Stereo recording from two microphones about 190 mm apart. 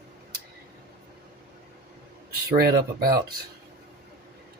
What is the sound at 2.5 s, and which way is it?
Speech, 50° right (ahead or behind).